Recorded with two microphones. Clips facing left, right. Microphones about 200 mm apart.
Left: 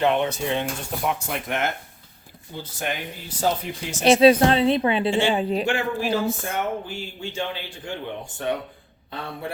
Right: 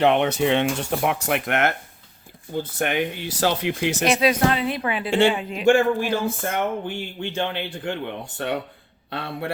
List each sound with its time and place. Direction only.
0.0 s speech: 70° right (ahead or behind)
4.0 s a woman's voice: 30° left (ahead or behind)
5.6 s a man's voice: 50° right (ahead or behind); by 9.5 s 70° right (ahead or behind)